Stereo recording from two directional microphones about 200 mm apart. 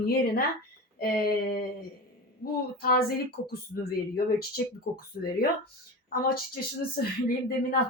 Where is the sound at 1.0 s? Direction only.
50° left (ahead or behind).